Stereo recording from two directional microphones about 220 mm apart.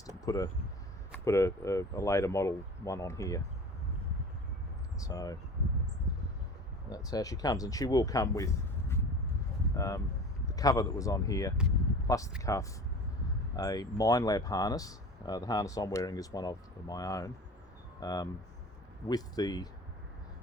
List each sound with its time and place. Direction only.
0.3 s speech: 15° left (ahead or behind)
5.0 s speech: 15° left (ahead or behind)
6.9 s speech: 15° left (ahead or behind)
9.7 s speech: 15° left (ahead or behind)